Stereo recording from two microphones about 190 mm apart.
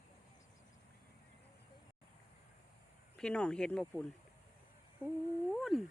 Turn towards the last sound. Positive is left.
turn(degrees=0)  # may be behind; listen again after turning